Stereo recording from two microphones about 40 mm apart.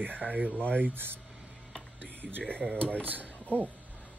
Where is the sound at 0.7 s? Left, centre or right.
Right.